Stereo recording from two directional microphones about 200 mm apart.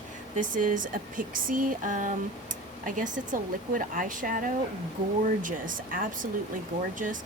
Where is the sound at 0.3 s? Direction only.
40° right (ahead or behind).